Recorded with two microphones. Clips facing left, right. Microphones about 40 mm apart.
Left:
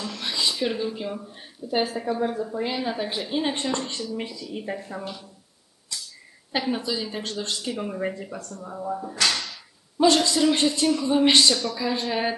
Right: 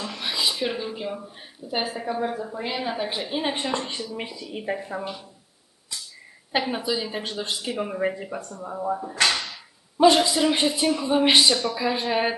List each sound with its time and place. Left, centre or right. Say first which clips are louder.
0.0 s speech: right 1 dB; centre
6.5 s speech: right 1 dB; centre